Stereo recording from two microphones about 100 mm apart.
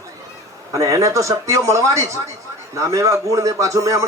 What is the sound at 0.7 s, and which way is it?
A man's voice, 35° right (ahead or behind).